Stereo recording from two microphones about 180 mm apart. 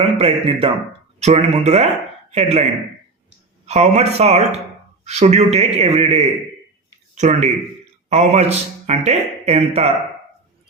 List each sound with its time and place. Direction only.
0.0 s speech: 30° right (ahead or behind)
3.7 s speech: 35° right (ahead or behind)